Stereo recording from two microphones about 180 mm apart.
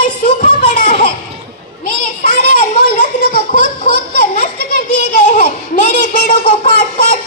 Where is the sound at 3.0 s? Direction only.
45° left (ahead or behind).